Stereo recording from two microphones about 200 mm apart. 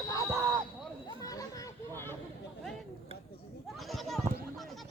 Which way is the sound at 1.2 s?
15° left (ahead or behind).